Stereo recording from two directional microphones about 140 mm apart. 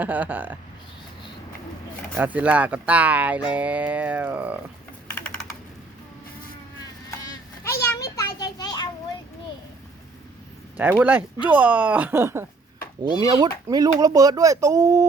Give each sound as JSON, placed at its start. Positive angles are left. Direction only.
{"t": 0.0, "sound": "speech", "side_deg": -10}
{"t": 2.1, "sound": "speech", "side_deg": -10}
{"t": 7.3, "sound": "a sound", "side_deg": 20}
{"t": 10.8, "sound": "speech", "side_deg": -15}
{"t": 13.0, "sound": "speech", "side_deg": -35}